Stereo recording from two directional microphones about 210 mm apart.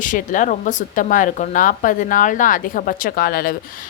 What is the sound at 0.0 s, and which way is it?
A woman's voice, 40° left (ahead or behind).